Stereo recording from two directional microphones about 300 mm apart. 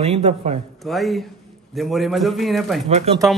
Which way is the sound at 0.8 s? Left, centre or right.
Centre.